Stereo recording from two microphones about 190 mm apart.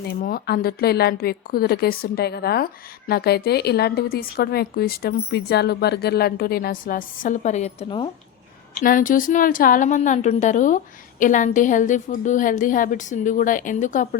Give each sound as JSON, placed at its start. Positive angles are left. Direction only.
{"t": 0.1, "sound": "a woman's voice", "side_deg": 50}
{"t": 8.8, "sound": "a woman's voice", "side_deg": 45}